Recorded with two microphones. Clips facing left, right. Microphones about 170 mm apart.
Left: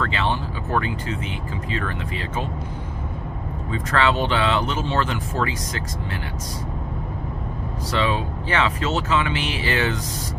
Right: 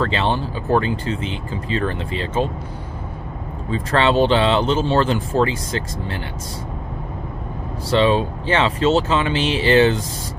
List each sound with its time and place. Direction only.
0.0 s speech: 30° right (ahead or behind)
3.7 s speech: 30° right (ahead or behind)
7.9 s speech: 30° right (ahead or behind)